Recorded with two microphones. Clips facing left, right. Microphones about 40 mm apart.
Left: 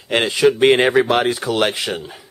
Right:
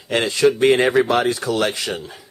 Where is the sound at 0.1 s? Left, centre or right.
Centre.